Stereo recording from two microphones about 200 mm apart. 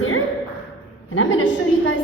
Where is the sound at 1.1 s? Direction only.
75° left (ahead or behind).